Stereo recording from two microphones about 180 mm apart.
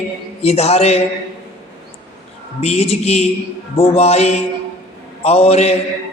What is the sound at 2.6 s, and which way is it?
A woman's voice, 35° left (ahead or behind).